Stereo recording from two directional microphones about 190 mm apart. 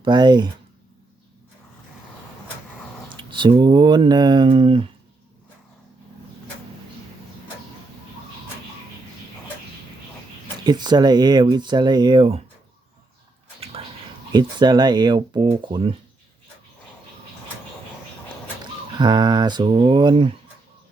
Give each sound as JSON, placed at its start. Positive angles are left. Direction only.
{"t": 0.0, "sound": "speech", "side_deg": -25}
{"t": 3.2, "sound": "speech", "side_deg": -25}
{"t": 10.6, "sound": "speech", "side_deg": -20}
{"t": 14.3, "sound": "speech", "side_deg": -20}
{"t": 18.6, "sound": "speech", "side_deg": -25}